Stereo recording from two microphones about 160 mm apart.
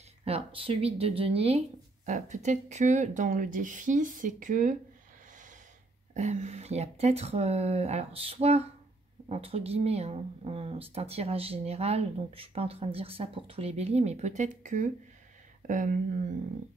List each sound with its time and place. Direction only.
0.2 s speech: 35° right (ahead or behind); by 4.7 s 55° right (ahead or behind)
6.1 s speech: 45° right (ahead or behind)